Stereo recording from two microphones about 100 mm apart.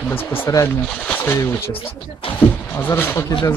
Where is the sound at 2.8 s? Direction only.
20° left (ahead or behind).